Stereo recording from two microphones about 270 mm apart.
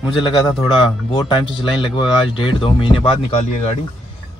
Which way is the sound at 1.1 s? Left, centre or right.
Centre.